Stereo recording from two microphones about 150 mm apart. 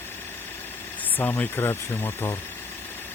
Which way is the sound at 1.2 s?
10° left (ahead or behind).